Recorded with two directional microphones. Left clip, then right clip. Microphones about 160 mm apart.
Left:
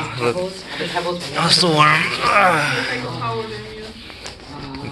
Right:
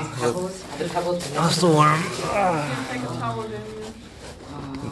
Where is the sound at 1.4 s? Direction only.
30° right (ahead or behind).